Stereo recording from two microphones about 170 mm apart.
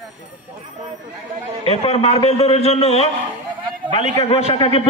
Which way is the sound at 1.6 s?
35° left (ahead or behind).